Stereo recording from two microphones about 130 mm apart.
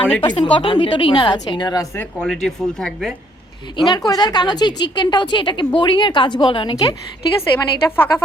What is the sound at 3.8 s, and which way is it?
A woman's voice, 30° left (ahead or behind).